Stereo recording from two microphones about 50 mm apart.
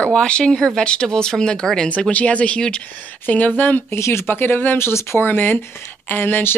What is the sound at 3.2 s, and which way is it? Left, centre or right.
Speech, left.